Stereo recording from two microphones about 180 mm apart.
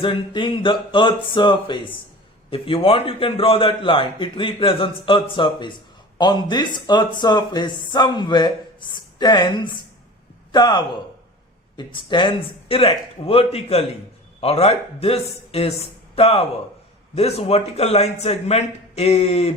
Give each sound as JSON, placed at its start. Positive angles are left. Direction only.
{"t": 0.0, "sound": "a man's voice", "side_deg": 25}